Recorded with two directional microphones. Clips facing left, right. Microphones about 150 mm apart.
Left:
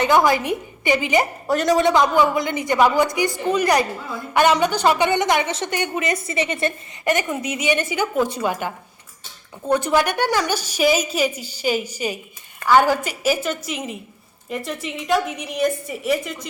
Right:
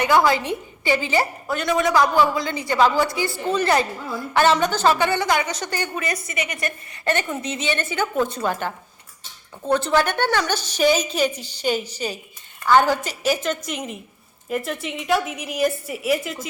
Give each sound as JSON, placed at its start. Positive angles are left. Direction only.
{"t": 0.0, "sound": "a woman's voice", "side_deg": 20}
{"t": 1.5, "sound": "a woman's voice", "side_deg": 35}
{"t": 1.9, "sound": "a woman's voice", "side_deg": 20}
{"t": 7.0, "sound": "a woman's voice", "side_deg": 10}